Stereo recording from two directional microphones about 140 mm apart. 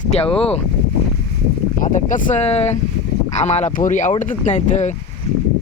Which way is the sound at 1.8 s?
65° left (ahead or behind).